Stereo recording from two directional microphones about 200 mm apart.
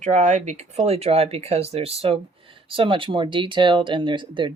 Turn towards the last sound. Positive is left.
turn(degrees=-25)  # may be behind; listen again after turning